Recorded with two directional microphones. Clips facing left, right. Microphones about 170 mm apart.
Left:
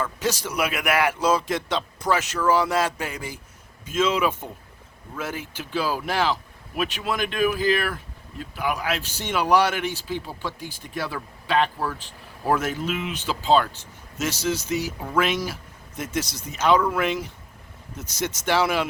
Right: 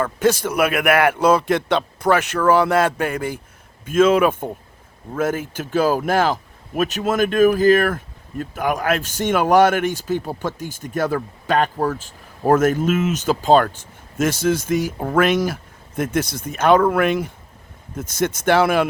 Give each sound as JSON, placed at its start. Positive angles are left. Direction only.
{"t": 0.0, "sound": "speech", "side_deg": -55}